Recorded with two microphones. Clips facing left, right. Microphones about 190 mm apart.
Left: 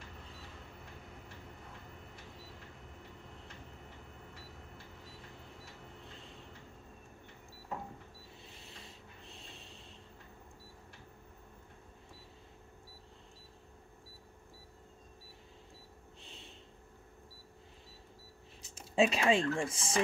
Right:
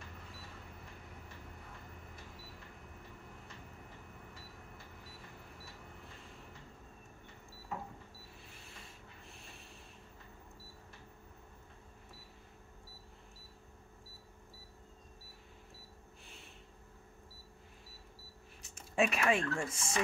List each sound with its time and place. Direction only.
18.8 s speech: 30° left (ahead or behind)